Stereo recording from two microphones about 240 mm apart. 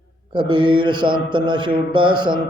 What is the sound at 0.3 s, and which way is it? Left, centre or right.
Mantra, centre.